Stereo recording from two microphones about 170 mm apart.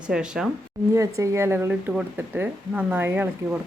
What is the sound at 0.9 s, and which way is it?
Speech, 20° right (ahead or behind).